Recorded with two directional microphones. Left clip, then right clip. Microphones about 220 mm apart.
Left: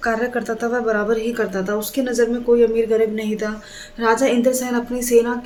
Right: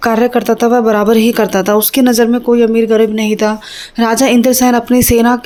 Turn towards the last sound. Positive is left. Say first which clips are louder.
# right 7 dB
turn(degrees=-40)  # may be behind; listen again after turning